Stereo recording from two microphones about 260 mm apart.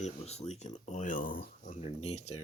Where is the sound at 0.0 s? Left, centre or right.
Left.